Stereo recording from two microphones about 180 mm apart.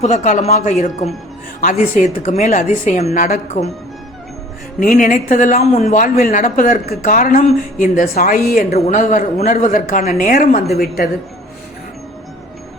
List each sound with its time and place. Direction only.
0.0 s speech: 40° left (ahead or behind)
4.8 s a woman's voice: 45° left (ahead or behind)